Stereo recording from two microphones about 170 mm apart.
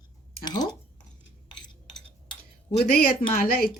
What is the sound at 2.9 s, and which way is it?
Speech, 60° left (ahead or behind).